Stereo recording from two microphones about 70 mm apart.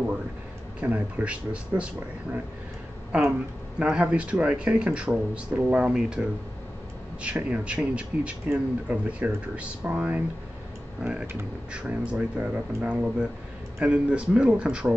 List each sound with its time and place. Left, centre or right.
0.7 s speech: right
3.8 s speech: centre